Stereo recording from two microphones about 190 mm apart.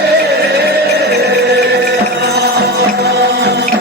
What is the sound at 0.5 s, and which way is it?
Music, 60° right (ahead or behind).